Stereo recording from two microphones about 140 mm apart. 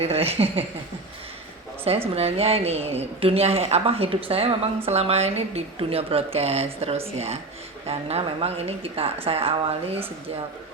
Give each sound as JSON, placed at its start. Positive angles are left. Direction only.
{"t": 0.0, "sound": "speech", "side_deg": -45}
{"t": 2.1, "sound": "speech", "side_deg": -45}